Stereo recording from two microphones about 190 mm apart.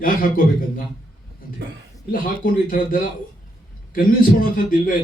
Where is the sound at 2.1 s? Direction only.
50° left (ahead or behind).